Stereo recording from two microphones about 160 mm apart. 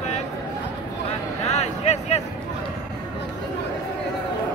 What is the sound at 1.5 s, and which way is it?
Speech, 40° left (ahead or behind).